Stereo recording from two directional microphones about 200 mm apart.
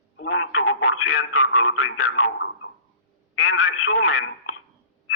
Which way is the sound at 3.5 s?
90° left.